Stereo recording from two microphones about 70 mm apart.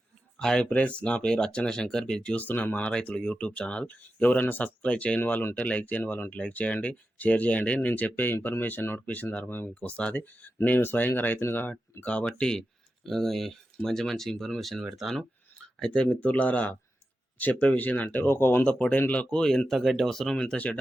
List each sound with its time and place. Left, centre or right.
0.3 s speech: centre
0.7 s speech: centre
5.2 s speech: left
12.0 s speech: centre
15.8 s speech: centre
18.2 s speech: left
18.6 s speech: centre
19.4 s speech: centre